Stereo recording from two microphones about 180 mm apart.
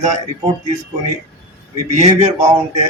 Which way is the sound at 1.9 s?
40° right (ahead or behind).